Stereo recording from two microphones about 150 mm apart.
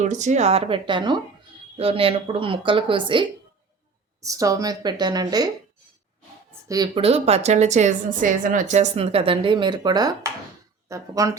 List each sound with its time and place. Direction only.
0.0 s speech: 55° right (ahead or behind); by 3.2 s 35° right (ahead or behind)
4.2 s a woman's voice: 20° right (ahead or behind)
6.9 s a woman's voice: 40° right (ahead or behind); by 11.3 s 20° right (ahead or behind)